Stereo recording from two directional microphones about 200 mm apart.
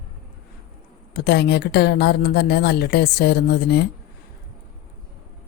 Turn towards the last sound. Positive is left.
turn(degrees=55)  # may be behind; listen again after turning